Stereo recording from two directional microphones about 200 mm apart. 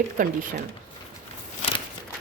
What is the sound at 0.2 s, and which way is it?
Speech, 40° right (ahead or behind).